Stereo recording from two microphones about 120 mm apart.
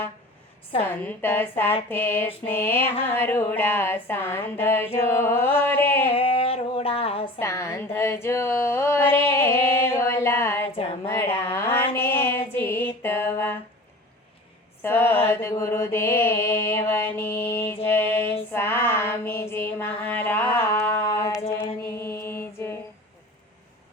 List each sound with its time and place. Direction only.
0.8 s mantra: 15° left (ahead or behind)
3.1 s speech: 15° left (ahead or behind)
6.1 s female singing: 55° left (ahead or behind)
7.3 s speech: 25° left (ahead or behind)
11.0 s a sound: 20° left (ahead or behind)
11.9 s music: 20° left (ahead or behind)
14.8 s mantra: 20° left (ahead or behind)
17.8 s music: 20° left (ahead or behind)
18.5 s female singing: 20° left (ahead or behind)
21.8 s mantra: 20° left (ahead or behind)